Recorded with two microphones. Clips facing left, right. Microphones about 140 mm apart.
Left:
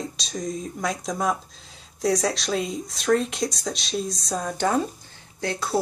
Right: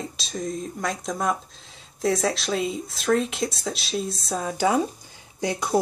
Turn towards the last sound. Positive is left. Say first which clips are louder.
# right 2 dB
turn(degrees=-15)  # may be behind; listen again after turning